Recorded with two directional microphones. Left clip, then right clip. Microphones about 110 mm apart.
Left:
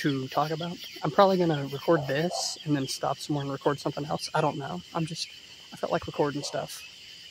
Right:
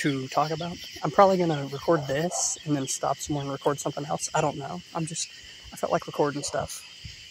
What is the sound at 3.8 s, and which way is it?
Speech, 20° left (ahead or behind).